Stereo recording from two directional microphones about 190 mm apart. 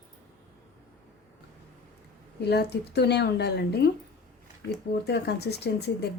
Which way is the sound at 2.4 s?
60° left (ahead or behind).